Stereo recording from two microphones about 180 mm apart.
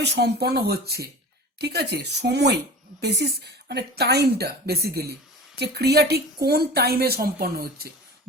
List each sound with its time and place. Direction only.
0.0 s speech: 65° right (ahead or behind)